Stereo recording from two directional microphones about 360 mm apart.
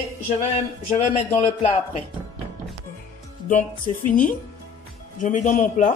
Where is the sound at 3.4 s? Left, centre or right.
Left.